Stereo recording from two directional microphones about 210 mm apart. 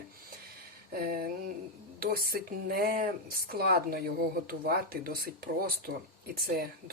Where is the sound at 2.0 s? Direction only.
45° right (ahead or behind).